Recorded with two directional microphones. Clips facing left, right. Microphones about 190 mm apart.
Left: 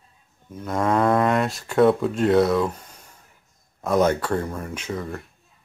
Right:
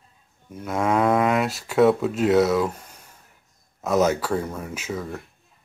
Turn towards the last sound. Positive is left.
turn(degrees=0)  # may be behind; listen again after turning